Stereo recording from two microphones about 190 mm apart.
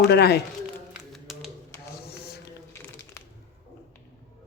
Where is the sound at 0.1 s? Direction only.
60° left (ahead or behind).